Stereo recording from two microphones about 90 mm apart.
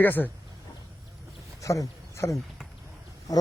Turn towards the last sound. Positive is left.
turn(degrees=45)  # may be behind; listen again after turning